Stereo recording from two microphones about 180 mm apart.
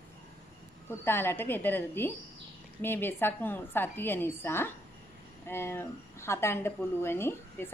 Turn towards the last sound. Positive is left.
turn(degrees=15)  # may be behind; listen again after turning